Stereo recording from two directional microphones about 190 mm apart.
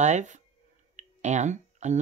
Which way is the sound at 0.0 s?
40° right (ahead or behind).